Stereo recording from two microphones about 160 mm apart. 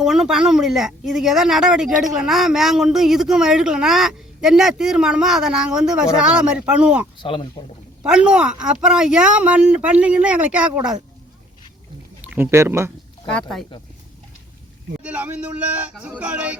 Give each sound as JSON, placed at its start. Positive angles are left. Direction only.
{"t": 0.0, "sound": "speech", "side_deg": -5}
{"t": 7.2, "sound": "speech", "side_deg": 30}
{"t": 8.0, "sound": "speech", "side_deg": -5}
{"t": 12.3, "sound": "speech", "side_deg": -15}
{"t": 13.3, "sound": "speech", "side_deg": 0}
{"t": 15.0, "sound": "speech", "side_deg": -10}